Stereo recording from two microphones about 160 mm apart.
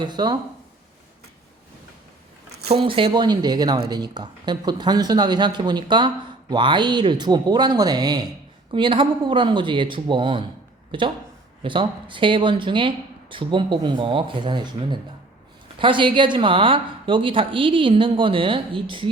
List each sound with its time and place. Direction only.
0.0 s speech: 25° right (ahead or behind)
2.6 s speech: 35° right (ahead or behind)